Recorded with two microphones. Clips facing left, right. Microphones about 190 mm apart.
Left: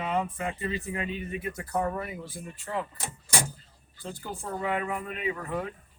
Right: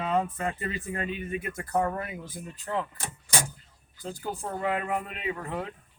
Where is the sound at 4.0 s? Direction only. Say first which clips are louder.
Right 3 dB; 40° right (ahead or behind).